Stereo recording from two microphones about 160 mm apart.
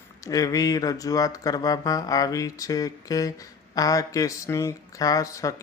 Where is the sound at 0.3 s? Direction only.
20° left (ahead or behind).